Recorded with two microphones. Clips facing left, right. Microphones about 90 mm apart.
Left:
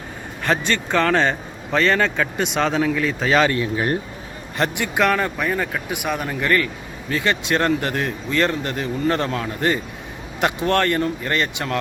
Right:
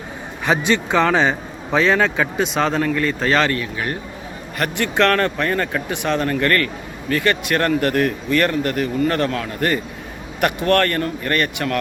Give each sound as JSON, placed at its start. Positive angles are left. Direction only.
{"t": 0.4, "sound": "a man's voice", "side_deg": -15}
{"t": 4.9, "sound": "speech", "side_deg": 10}